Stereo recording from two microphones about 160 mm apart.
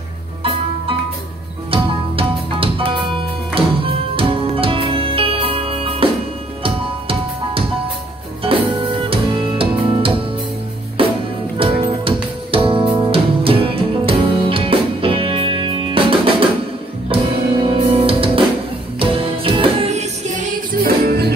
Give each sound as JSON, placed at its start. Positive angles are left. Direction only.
{"t": 0.4, "sound": "music", "side_deg": -35}
{"t": 20.8, "sound": "music", "side_deg": -80}